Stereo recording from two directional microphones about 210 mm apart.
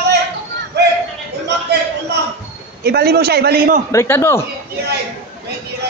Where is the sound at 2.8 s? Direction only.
50° right (ahead or behind).